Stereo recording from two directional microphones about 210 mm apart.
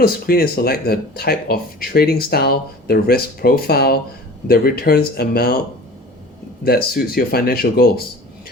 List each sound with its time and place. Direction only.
0.0 s speech: 45° left (ahead or behind)
6.7 s speech: 45° left (ahead or behind)